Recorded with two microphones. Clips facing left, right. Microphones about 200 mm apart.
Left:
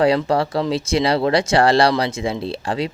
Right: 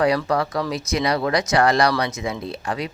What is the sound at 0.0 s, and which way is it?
Speech, 25° left (ahead or behind).